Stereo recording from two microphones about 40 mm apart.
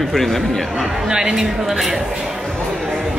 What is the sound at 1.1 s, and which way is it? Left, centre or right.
Speech, centre.